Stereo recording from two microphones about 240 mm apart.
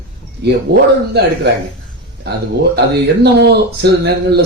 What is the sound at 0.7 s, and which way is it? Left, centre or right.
Speech, right.